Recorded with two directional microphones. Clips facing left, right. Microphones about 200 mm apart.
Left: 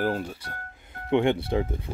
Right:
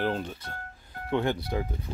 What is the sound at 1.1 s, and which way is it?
Speech, 25° left (ahead or behind).